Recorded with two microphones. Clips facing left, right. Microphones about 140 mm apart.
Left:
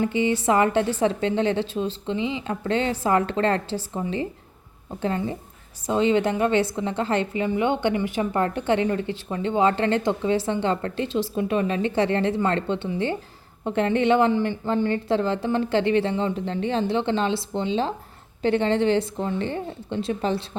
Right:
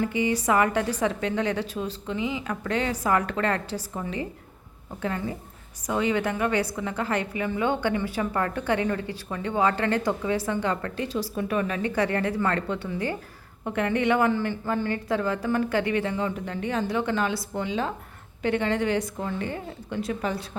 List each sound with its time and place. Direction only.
0.0 s a woman's voice: 25° left (ahead or behind)